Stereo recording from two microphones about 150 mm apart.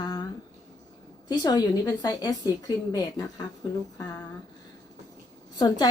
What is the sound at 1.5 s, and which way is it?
A woman's voice, 25° left (ahead or behind).